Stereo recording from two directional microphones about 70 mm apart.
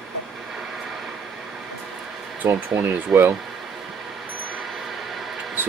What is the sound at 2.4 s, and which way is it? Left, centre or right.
Speech, right.